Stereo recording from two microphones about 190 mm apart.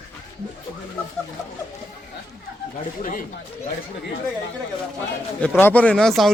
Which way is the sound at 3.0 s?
45° left (ahead or behind).